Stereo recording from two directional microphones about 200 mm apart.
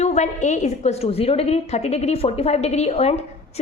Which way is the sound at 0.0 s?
35° left (ahead or behind).